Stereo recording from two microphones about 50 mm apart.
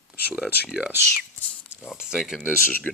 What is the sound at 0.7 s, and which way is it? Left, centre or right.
Speech, centre.